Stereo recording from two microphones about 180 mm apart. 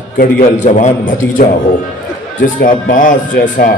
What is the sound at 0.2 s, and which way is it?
A man's voice, 40° left (ahead or behind).